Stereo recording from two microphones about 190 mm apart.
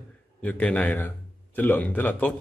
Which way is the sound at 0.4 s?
10° left (ahead or behind).